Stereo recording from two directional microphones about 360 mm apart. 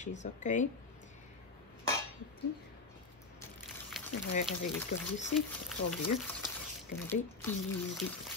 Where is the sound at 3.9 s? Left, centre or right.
Centre.